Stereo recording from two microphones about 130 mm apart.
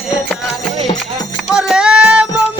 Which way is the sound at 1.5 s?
5° right (ahead or behind).